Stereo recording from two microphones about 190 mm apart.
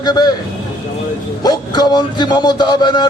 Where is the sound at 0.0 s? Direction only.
20° left (ahead or behind).